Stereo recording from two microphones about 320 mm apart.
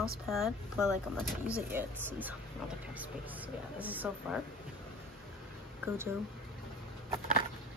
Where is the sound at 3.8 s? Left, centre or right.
Centre.